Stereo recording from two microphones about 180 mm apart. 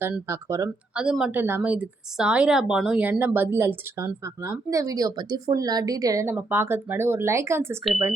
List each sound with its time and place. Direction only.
0.0 s a woman's voice: 15° right (ahead or behind)
0.9 s a woman's voice: 5° right (ahead or behind)